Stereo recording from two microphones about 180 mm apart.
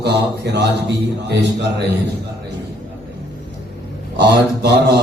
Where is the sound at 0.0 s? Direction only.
70° right (ahead or behind).